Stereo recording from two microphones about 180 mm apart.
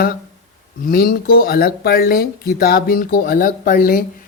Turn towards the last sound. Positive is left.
turn(degrees=50)  # may be behind; listen again after turning